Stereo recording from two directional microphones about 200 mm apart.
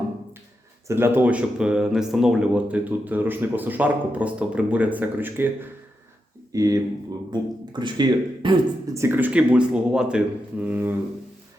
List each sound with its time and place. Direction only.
0.9 s speech: 10° right (ahead or behind)